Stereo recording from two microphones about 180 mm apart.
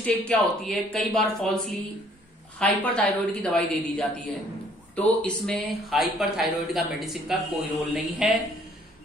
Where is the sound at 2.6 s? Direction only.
5° left (ahead or behind).